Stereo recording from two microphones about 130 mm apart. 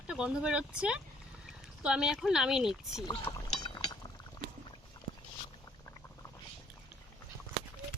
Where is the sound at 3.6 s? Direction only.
35° left (ahead or behind).